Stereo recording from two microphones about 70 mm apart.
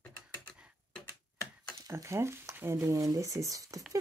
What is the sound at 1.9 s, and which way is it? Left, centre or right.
Speech, right.